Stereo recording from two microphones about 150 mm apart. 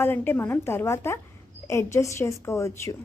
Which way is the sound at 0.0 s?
15° left (ahead or behind).